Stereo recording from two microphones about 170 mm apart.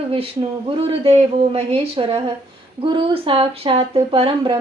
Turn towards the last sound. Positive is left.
turn(degrees=-35)  # may be behind; listen again after turning